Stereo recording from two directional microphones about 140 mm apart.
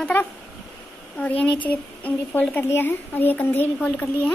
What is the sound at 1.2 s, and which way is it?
A woman's voice, 10° left (ahead or behind).